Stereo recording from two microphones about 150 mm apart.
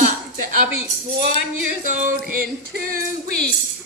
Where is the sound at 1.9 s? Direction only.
65° right (ahead or behind).